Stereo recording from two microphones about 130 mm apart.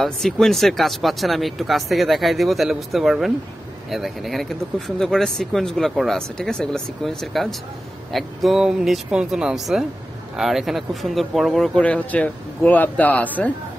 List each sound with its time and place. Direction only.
0.0 s speech: 5° left (ahead or behind)